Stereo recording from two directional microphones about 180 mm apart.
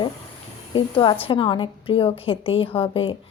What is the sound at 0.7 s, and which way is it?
A woman's voice, 25° left (ahead or behind).